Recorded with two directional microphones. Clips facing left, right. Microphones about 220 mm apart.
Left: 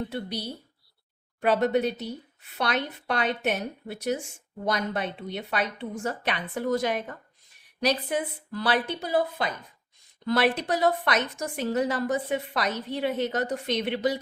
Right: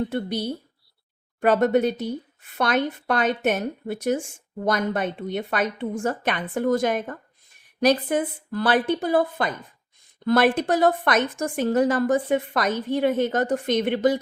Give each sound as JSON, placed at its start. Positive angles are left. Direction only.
{"t": 0.1, "sound": "a woman's voice", "side_deg": -50}